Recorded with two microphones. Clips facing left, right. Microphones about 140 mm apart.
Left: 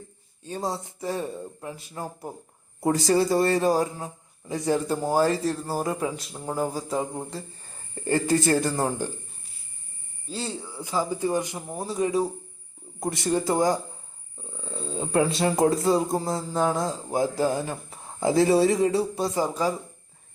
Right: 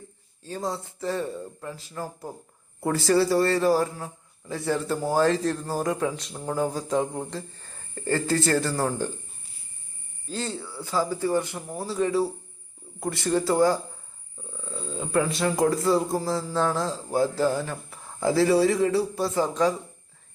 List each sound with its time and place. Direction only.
0.4 s a man's voice: 20° left (ahead or behind)
10.2 s a man's voice: 10° left (ahead or behind)